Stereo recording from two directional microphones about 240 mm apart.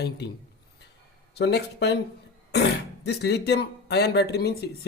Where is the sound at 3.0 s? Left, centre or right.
Left.